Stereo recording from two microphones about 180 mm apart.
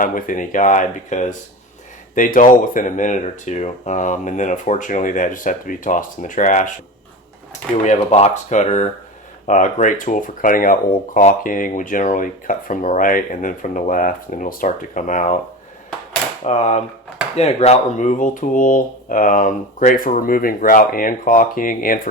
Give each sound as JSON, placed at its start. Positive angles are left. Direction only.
{"t": 0.0, "sound": "speech", "side_deg": 50}
{"t": 7.9, "sound": "speech", "side_deg": 35}
{"t": 16.4, "sound": "speech", "side_deg": 40}